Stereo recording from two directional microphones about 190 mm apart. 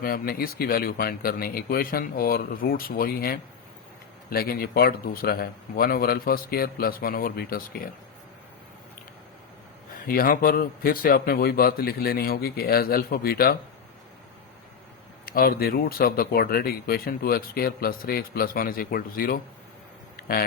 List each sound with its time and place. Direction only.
0.0 s speech: 50° left (ahead or behind)
10.1 s speech: 50° left (ahead or behind)
15.3 s speech: 50° left (ahead or behind)
20.1 s a sound: 50° left (ahead or behind)